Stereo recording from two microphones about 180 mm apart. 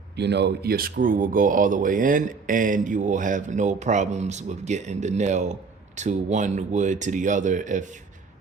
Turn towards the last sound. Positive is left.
turn(degrees=-45)  # may be behind; listen again after turning